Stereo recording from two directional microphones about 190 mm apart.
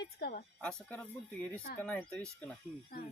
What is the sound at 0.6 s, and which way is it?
Speech, 5° left (ahead or behind).